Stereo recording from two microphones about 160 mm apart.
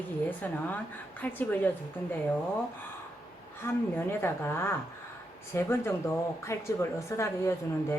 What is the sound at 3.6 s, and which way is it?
Speech, 15° left (ahead or behind).